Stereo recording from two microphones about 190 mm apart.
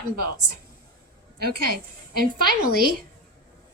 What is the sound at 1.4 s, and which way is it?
A woman's voice, 50° right (ahead or behind).